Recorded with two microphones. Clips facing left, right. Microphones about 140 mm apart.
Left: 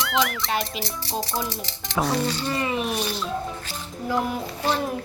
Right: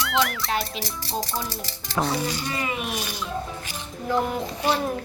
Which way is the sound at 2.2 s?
10° right (ahead or behind).